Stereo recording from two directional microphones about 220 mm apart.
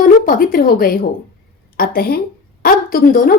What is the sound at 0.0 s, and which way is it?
Speech, 40° left (ahead or behind).